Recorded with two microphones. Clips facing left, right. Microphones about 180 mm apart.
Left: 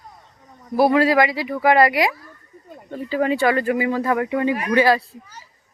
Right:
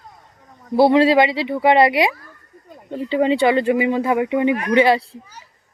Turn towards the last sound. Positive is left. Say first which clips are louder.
# right 2 dB
turn(degrees=-25)  # may be behind; listen again after turning